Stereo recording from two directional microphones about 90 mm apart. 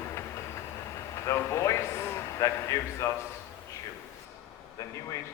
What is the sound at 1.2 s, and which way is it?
A man's voice, 35° left (ahead or behind).